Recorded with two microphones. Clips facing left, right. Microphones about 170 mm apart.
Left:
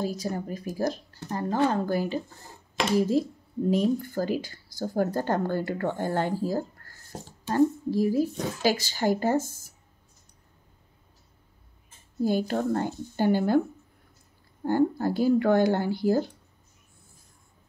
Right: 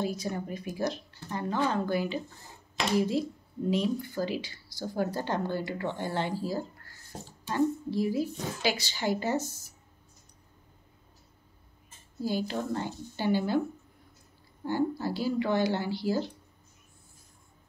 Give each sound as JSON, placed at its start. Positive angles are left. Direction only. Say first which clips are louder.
{"t": 0.0, "sound": "speech", "louder": "left 2 dB", "side_deg": 40}
{"t": 12.2, "sound": "speech", "louder": "left 6 dB", "side_deg": 50}
{"t": 14.6, "sound": "speech", "louder": "left 5 dB", "side_deg": 50}